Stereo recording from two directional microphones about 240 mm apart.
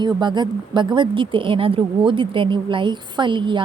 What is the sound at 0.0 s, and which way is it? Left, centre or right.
Speech, centre.